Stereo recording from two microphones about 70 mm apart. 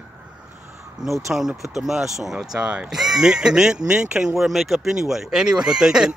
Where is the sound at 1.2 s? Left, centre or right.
Centre.